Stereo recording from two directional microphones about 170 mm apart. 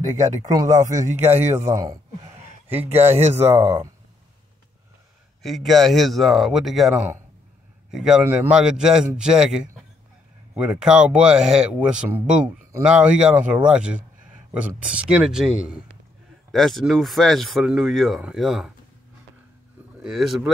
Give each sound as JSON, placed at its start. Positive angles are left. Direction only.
{"t": 0.4, "sound": "speech", "side_deg": -20}
{"t": 1.1, "sound": "a man's voice", "side_deg": -40}
{"t": 1.6, "sound": "speech", "side_deg": -20}
{"t": 2.2, "sound": "a sound", "side_deg": -40}
{"t": 2.7, "sound": "speech", "side_deg": -10}
{"t": 5.4, "sound": "speech", "side_deg": 0}
{"t": 13.7, "sound": "a sound", "side_deg": -5}
{"t": 14.8, "sound": "speech", "side_deg": -5}
{"t": 20.0, "sound": "speech", "side_deg": 0}